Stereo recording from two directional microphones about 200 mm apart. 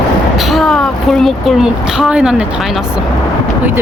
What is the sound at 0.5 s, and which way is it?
Speech, centre (ahead or behind).